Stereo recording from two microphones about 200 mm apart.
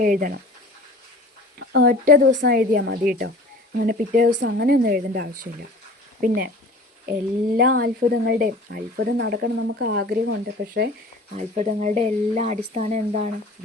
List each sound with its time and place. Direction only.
0.0 s speech: 40° right (ahead or behind)
1.5 s speech: 50° right (ahead or behind)
4.3 s speech: 60° right (ahead or behind)
7.8 s speech: 50° right (ahead or behind)
11.3 s speech: 35° right (ahead or behind)